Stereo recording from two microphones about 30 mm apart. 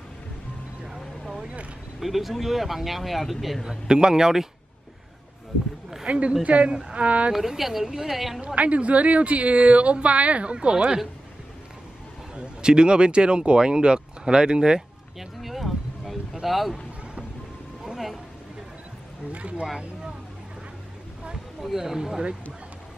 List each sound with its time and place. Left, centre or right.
2.0 s speech: centre
3.6 s speech: right
6.0 s speech: right
7.0 s a woman's voice: right
7.3 s speech: centre
8.5 s a woman's voice: right
12.4 s speech: right
15.1 s a sound: centre
16.4 s speech: centre
17.9 s a sound: centre
19.3 s a woman's voice: right
21.5 s speech: centre